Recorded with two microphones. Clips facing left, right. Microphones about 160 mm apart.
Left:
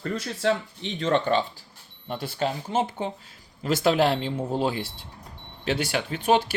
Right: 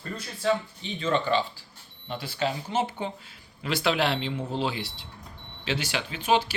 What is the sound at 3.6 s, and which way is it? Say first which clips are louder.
Speech: left 4 dB; 45° left (ahead or behind).